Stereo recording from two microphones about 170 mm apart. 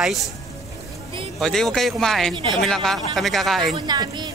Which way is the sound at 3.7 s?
25° right (ahead or behind).